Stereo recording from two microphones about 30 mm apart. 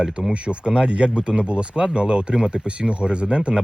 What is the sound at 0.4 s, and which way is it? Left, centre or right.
Speech, right.